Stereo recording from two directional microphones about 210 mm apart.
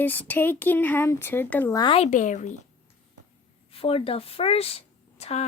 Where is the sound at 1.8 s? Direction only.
30° left (ahead or behind).